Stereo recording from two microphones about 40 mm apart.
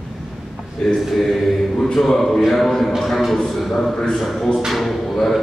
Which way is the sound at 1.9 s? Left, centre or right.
Centre.